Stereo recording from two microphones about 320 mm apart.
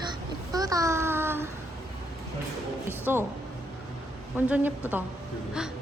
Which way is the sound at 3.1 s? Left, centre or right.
Centre.